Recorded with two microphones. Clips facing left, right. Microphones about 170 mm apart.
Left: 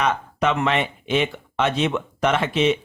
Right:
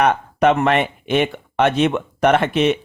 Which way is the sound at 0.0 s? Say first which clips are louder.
Right 6 dB; 55° right (ahead or behind).